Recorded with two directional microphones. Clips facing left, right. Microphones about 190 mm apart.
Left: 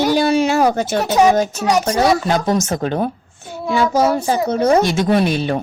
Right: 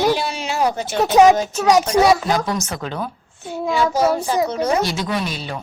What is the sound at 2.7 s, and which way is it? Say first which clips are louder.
Speech: left 7 dB; 50° left (ahead or behind).